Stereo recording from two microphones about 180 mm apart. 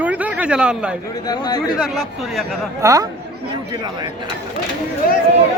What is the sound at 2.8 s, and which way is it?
Speech, 20° right (ahead or behind).